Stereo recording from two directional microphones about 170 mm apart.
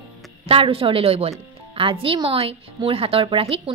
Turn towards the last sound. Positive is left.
turn(degrees=-35)  # may be behind; listen again after turning